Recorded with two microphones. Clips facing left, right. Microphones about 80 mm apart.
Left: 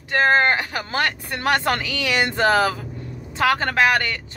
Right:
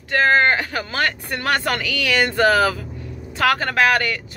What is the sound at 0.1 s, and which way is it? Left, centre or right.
Speech, left.